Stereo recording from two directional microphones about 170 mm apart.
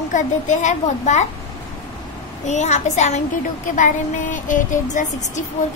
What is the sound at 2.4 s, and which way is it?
Music, 45° left (ahead or behind).